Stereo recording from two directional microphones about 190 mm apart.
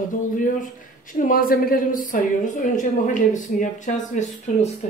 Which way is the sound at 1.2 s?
50° left (ahead or behind).